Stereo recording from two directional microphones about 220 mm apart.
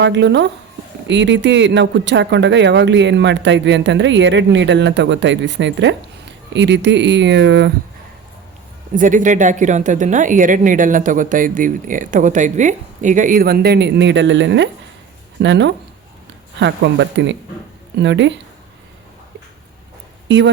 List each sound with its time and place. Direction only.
0.0 s speech: 55° right (ahead or behind)
9.0 s speech: 35° right (ahead or behind); by 18.3 s 55° right (ahead or behind)
20.2 s speech: 55° right (ahead or behind)